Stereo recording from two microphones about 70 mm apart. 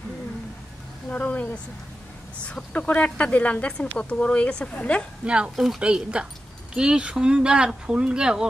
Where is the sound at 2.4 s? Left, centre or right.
Centre.